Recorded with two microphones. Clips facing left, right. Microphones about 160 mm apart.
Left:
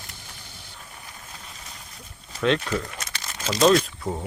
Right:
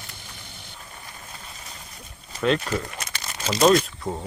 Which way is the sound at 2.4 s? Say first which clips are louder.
Even; 5° right (ahead or behind).